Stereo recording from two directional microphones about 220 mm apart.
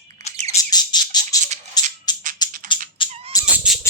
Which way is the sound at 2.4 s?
20° left (ahead or behind).